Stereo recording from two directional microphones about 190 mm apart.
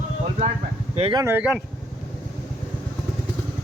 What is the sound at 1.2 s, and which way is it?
Speech, 10° right (ahead or behind).